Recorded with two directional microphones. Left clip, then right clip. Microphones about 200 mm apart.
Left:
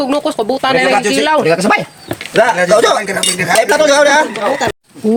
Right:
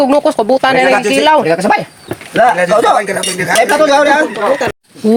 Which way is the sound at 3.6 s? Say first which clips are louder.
Right 1 dB; 60° left (ahead or behind).